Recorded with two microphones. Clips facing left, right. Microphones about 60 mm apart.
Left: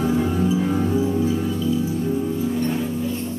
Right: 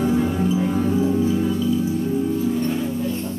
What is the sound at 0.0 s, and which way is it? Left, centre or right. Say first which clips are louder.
Music: right 1 dB; centre.